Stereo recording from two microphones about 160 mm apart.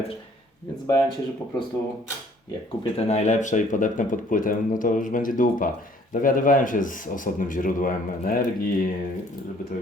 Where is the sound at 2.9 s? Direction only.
45° left (ahead or behind); by 8.9 s 60° left (ahead or behind).